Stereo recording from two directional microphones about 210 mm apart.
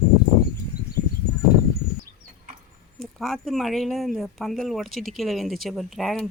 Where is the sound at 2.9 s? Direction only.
Centre (ahead or behind).